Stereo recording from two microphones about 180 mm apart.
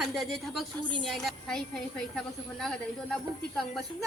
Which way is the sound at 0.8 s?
25° right (ahead or behind).